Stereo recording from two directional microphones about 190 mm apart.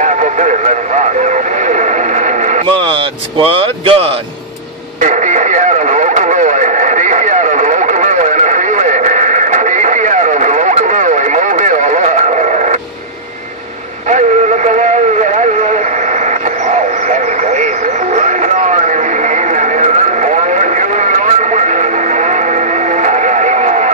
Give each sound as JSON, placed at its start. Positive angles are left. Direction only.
{"t": 0.0, "sound": "radio", "side_deg": -40}
{"t": 2.8, "sound": "speech", "side_deg": -30}
{"t": 5.0, "sound": "radio", "side_deg": -40}
{"t": 14.0, "sound": "synthetic singing", "side_deg": -40}
{"t": 17.1, "sound": "vehicle", "side_deg": -40}
{"t": 18.1, "sound": "a sound", "side_deg": -40}